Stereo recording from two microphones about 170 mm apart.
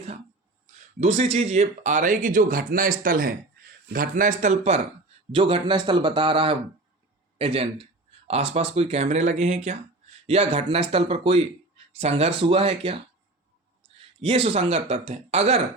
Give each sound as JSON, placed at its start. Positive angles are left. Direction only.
{"t": 0.9, "sound": "speech", "side_deg": -40}
{"t": 5.3, "sound": "a man's voice", "side_deg": -30}
{"t": 14.2, "sound": "speech", "side_deg": -35}